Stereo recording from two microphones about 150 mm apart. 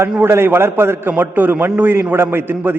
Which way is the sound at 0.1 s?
15° right (ahead or behind).